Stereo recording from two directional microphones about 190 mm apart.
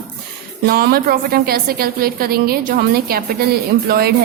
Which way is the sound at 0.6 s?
55° right (ahead or behind).